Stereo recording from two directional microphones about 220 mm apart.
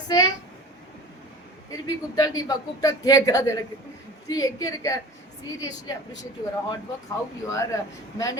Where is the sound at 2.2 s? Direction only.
15° left (ahead or behind).